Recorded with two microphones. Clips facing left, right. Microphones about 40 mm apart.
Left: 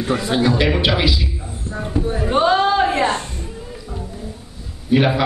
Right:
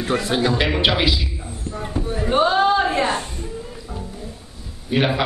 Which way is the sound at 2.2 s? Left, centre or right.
Left.